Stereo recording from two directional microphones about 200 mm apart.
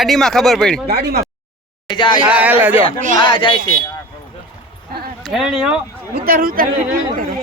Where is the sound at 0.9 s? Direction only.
55° right (ahead or behind).